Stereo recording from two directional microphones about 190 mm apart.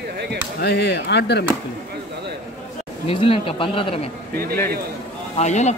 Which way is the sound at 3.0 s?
30° left (ahead or behind).